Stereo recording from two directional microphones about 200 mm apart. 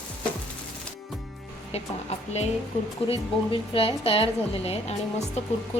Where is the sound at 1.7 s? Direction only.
30° left (ahead or behind).